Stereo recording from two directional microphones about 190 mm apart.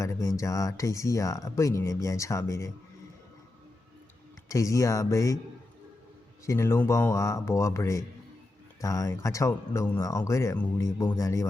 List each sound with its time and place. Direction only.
0.0 s speech: 15° left (ahead or behind)
4.4 s speech: 15° left (ahead or behind)
6.4 s speech: 15° left (ahead or behind)